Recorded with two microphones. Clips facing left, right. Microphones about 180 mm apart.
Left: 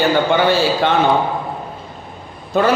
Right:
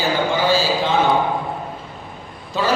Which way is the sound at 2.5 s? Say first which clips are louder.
Left 6 dB; 55° left (ahead or behind).